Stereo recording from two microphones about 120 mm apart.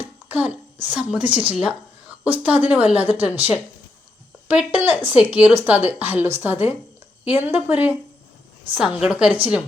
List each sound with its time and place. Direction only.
0.3 s a child's voice: 15° right (ahead or behind)